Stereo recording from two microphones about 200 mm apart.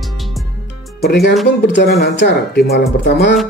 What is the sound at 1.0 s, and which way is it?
Speech, 55° left (ahead or behind).